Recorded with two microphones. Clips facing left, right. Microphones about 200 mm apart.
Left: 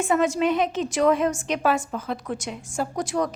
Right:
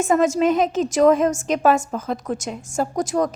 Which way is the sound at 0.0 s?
45° right (ahead or behind).